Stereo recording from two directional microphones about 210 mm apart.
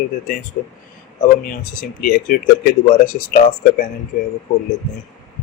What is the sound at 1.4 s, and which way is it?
Speech, 40° left (ahead or behind).